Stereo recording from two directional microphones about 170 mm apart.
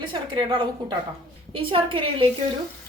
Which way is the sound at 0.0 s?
30° right (ahead or behind).